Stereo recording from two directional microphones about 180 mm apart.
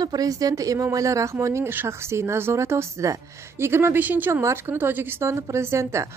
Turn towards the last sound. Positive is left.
turn(degrees=-15)  # may be behind; listen again after turning